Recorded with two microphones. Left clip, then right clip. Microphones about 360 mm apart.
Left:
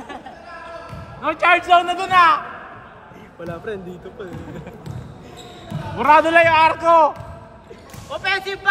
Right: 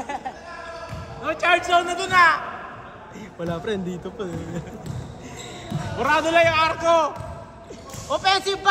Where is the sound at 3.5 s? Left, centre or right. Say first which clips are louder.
Right 2 dB; right.